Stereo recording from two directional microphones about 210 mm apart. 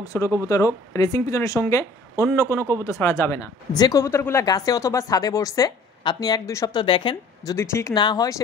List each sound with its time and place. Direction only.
0.0 s speech: 15° left (ahead or behind)
7.5 s speech: 15° left (ahead or behind)